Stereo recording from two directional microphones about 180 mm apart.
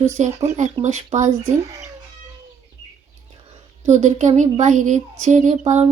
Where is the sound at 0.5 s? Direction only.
40° right (ahead or behind).